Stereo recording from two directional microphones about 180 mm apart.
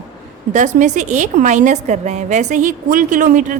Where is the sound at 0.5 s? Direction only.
45° right (ahead or behind).